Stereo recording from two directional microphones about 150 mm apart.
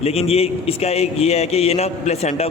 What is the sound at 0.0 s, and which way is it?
A man's voice, 45° left (ahead or behind).